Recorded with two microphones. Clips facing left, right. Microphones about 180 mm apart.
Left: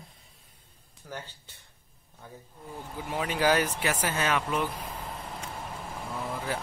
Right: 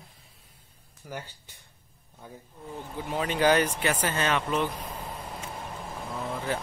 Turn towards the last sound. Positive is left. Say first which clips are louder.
# right 2 dB
turn(degrees=10)  # may be behind; listen again after turning